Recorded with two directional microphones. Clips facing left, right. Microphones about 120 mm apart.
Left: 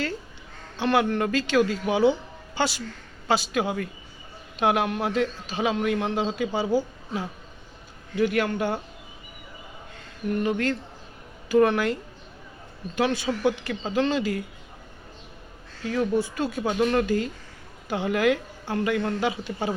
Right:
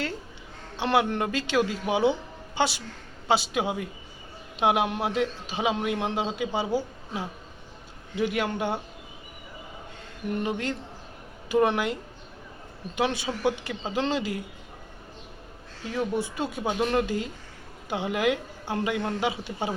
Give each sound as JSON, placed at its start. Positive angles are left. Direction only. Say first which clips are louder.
{"t": 0.8, "sound": "a woman's voice", "louder": "left 2 dB", "side_deg": -25}
{"t": 3.2, "sound": "a woman's voice", "louder": "left 1 dB", "side_deg": -20}
{"t": 8.1, "sound": "a man's voice", "louder": "left 3 dB", "side_deg": -10}
{"t": 10.3, "sound": "a woman's voice", "louder": "left 4 dB", "side_deg": -20}
{"t": 13.0, "sound": "a woman's voice", "louder": "left 3 dB", "side_deg": -20}
{"t": 15.9, "sound": "a woman's voice", "louder": "left 4 dB", "side_deg": -20}